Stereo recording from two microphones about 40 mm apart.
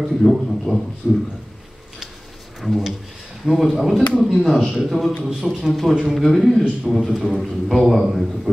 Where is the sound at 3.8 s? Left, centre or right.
Centre.